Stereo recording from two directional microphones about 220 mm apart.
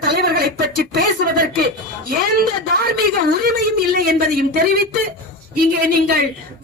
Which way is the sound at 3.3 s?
45° right (ahead or behind).